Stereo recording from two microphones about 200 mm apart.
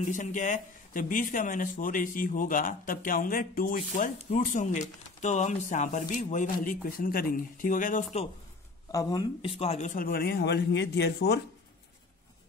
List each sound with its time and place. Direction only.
0.0 s speech: 40° left (ahead or behind)
8.9 s speech: 20° left (ahead or behind); by 11.4 s 55° left (ahead or behind)